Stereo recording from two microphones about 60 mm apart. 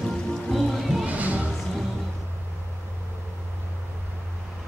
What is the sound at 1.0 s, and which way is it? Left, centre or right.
Music, right.